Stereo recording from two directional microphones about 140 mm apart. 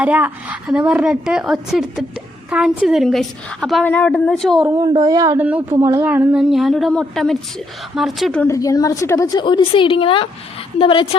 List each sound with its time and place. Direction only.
0.0 s a woman's voice: 10° right (ahead or behind)
4.8 s speech: 25° right (ahead or behind)
5.4 s a woman's voice: 10° right (ahead or behind)
8.4 s a woman's voice: 25° left (ahead or behind); by 11.2 s 40° left (ahead or behind)